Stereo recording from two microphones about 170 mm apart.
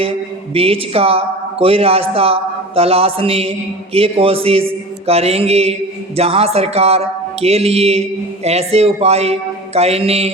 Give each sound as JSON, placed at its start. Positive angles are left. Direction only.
{"t": 0.0, "sound": "a man's voice", "side_deg": -35}